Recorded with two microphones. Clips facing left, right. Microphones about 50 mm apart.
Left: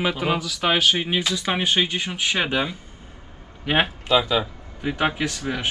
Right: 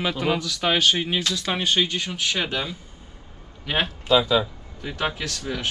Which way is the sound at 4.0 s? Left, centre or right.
Left.